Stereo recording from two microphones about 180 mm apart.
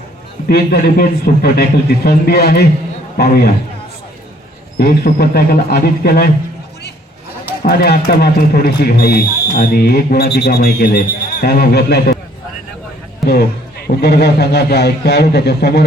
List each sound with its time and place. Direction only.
0.4 s speech: 60° left (ahead or behind)
4.8 s speech: 60° left (ahead or behind)
7.4 s speech: 55° left (ahead or behind)
13.2 s speech: 60° left (ahead or behind)